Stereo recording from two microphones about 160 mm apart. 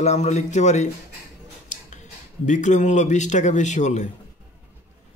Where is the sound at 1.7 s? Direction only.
55° left (ahead or behind).